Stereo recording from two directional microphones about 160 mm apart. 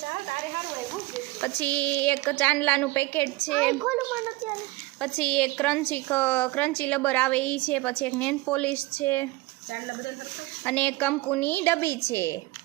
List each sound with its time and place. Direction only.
1.4 s a woman's voice: 10° left (ahead or behind)
10.7 s a woman's voice: 10° left (ahead or behind)